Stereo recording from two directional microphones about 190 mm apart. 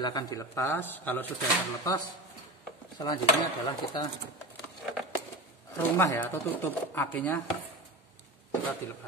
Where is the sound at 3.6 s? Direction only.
20° left (ahead or behind).